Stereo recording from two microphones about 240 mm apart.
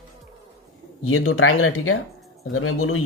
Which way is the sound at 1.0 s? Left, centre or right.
Left.